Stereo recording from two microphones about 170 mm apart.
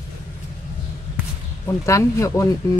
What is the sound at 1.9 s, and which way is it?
Speech, 20° left (ahead or behind).